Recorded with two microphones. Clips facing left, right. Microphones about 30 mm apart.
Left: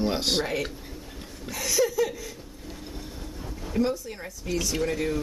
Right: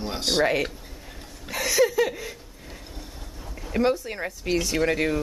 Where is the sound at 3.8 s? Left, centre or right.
Right.